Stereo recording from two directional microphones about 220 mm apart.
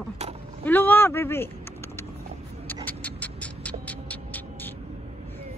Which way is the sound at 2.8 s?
5° left (ahead or behind).